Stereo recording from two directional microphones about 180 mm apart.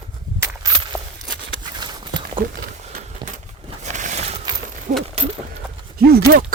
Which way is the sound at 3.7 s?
40° right (ahead or behind).